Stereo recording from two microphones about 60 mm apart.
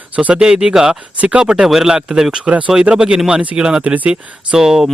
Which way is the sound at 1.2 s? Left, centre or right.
Centre.